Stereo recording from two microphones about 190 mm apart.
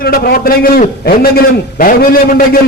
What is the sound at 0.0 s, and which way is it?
A man's voice, 50° left (ahead or behind).